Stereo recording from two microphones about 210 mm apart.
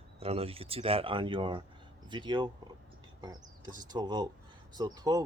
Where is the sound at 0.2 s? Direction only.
30° right (ahead or behind).